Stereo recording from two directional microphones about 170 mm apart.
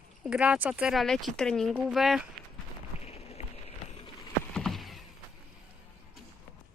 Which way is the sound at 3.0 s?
35° left (ahead or behind).